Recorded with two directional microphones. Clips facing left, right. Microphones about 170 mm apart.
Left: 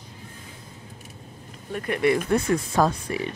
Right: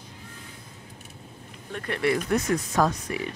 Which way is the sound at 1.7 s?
10° left (ahead or behind).